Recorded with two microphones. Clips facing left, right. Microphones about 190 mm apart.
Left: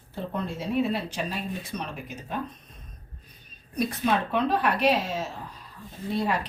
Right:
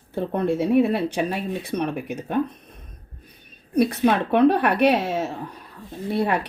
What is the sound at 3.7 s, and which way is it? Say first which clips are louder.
A woman's voice: right 7 dB; 65° right (ahead or behind).